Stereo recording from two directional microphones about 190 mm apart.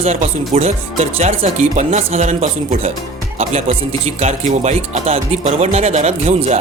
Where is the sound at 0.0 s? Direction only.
35° right (ahead or behind).